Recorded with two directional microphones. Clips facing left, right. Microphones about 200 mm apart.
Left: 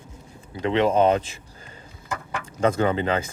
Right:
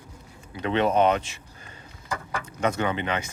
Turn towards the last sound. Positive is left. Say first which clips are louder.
# left 5 dB
turn(degrees=35)  # may be behind; listen again after turning